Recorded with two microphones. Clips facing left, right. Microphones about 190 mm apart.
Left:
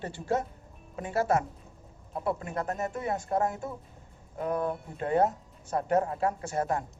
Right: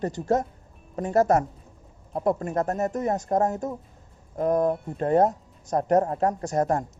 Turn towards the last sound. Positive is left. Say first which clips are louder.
# right 6 dB
turn(degrees=-40)  # may be behind; listen again after turning